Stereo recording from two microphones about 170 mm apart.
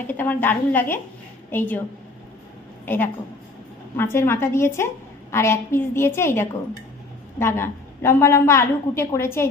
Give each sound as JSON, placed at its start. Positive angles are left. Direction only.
{"t": 0.1, "sound": "a woman's voice", "side_deg": 10}
{"t": 2.8, "sound": "a woman's voice", "side_deg": 10}